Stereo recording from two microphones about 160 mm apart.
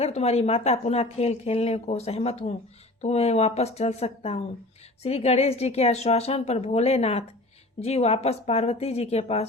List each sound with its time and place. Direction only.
0.0 s speech: 40° left (ahead or behind)